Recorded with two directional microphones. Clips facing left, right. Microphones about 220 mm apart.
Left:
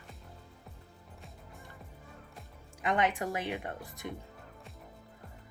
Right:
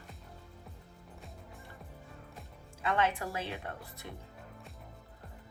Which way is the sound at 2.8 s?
15° left (ahead or behind).